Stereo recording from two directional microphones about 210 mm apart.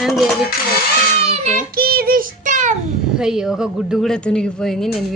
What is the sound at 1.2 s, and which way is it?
Child singing, 30° right (ahead or behind).